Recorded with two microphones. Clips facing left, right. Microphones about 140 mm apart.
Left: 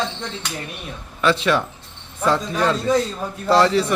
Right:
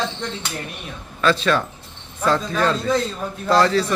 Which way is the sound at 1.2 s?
20° left (ahead or behind).